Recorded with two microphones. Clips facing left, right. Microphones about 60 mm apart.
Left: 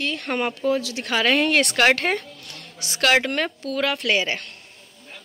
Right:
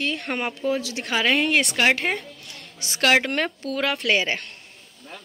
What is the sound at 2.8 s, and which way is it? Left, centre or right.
Speech, right.